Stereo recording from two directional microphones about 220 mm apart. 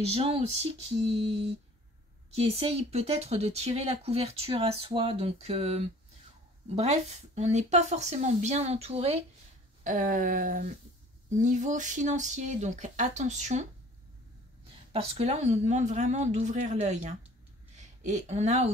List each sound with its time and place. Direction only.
0.1 s a woman's voice: 25° right (ahead or behind)
14.9 s a woman's voice: 25° right (ahead or behind)